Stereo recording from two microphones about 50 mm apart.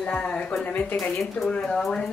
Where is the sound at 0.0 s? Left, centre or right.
Left.